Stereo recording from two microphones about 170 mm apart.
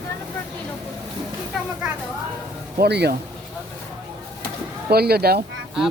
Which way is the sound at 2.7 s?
75° right (ahead or behind).